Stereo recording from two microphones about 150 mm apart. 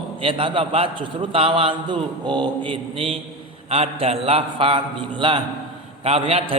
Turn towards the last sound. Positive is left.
turn(degrees=-35)  # may be behind; listen again after turning